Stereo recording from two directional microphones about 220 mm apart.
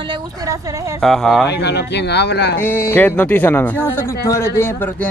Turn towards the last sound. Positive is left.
turn(degrees=10)  # may be behind; listen again after turning